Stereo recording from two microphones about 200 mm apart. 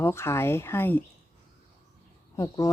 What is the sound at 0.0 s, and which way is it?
Speech, 15° left (ahead or behind).